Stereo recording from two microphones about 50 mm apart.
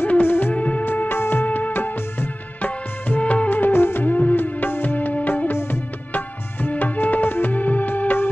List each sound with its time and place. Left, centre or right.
0.0 s music: left
1.4 s music: left
2.6 s music: left
3.4 s music: left